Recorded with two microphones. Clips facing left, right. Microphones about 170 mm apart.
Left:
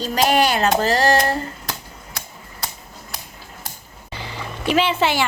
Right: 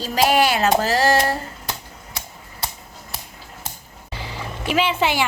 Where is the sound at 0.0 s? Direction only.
5° right (ahead or behind).